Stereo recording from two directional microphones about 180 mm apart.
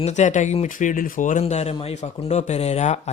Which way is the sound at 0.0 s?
40° left (ahead or behind).